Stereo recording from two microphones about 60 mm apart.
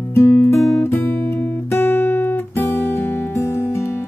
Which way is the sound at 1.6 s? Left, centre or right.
Left.